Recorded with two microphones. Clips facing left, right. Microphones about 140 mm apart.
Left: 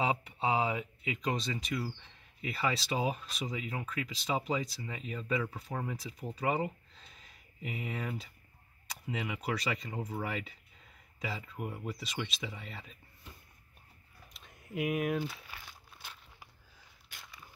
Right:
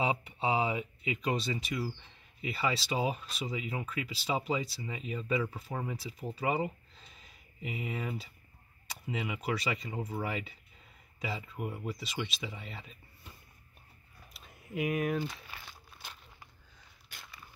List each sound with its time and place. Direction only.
0.0 s speech: 10° right (ahead or behind)
14.3 s crumpling: 5° right (ahead or behind)